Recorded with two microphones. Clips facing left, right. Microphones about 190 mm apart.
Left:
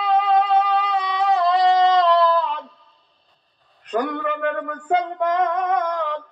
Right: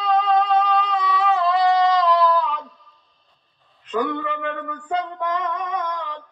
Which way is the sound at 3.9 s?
45° left (ahead or behind).